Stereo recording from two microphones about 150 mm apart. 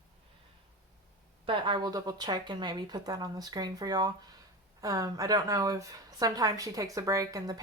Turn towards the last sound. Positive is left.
turn(degrees=-25)  # may be behind; listen again after turning